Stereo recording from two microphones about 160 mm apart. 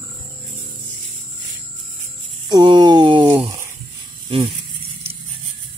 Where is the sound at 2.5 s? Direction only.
25° right (ahead or behind).